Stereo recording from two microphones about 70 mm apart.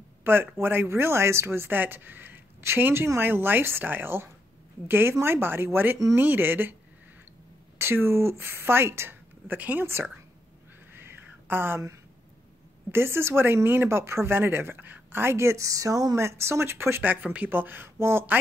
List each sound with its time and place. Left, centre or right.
0.2 s speech: right
7.8 s speech: right
9.6 s speech: right
10.9 s a sound: right
12.9 s speech: right
16.2 s speech: right
17.0 s speech: right